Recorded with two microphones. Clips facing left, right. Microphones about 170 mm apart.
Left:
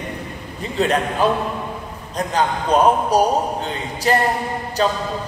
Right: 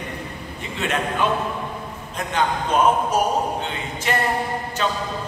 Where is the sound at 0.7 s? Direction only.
35° left (ahead or behind).